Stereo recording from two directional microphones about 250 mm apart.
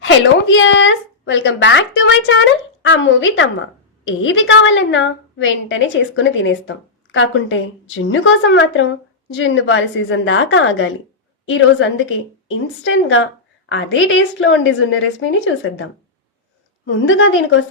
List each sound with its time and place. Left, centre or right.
0.0 s a woman's voice: left
17.1 s a woman's voice: left